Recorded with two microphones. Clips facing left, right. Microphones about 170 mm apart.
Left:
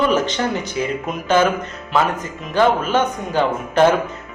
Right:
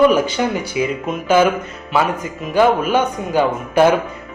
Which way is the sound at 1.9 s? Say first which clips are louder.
Right 1 dB; 10° right (ahead or behind).